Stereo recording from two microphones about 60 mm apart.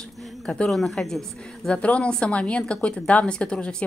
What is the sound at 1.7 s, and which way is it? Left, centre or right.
A woman's voice, centre.